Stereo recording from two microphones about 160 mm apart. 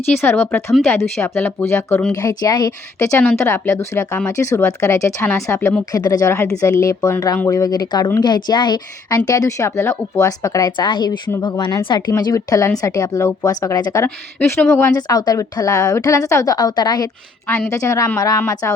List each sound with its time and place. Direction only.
0.2 s speech: 10° left (ahead or behind)
0.7 s speech: centre (ahead or behind)
0.9 s speech: 15° left (ahead or behind)
2.1 s speech: 25° left (ahead or behind)